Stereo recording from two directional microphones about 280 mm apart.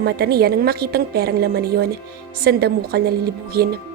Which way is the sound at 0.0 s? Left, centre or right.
Right.